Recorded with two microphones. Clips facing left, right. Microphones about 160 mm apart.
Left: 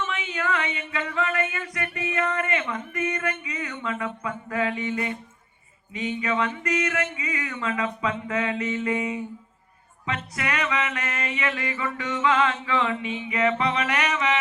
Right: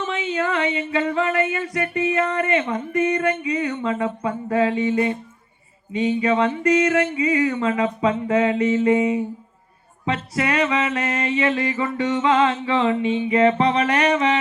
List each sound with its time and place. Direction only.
0.0 s music: 30° right (ahead or behind)